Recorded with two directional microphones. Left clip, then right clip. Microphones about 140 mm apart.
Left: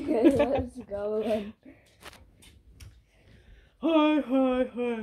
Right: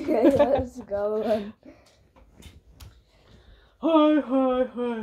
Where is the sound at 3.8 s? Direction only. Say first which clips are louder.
Right 4 dB; 35° left (ahead or behind).